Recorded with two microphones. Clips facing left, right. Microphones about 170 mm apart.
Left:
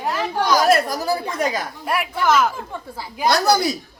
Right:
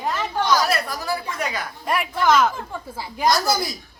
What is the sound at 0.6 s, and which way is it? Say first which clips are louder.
A woman's voice: left 7 dB; 45° left (ahead or behind).